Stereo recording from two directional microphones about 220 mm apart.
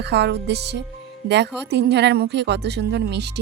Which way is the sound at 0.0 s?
50° right (ahead or behind).